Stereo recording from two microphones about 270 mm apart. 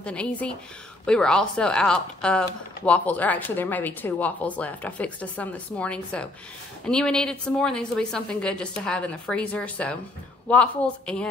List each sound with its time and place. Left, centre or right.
0.0 s speech: centre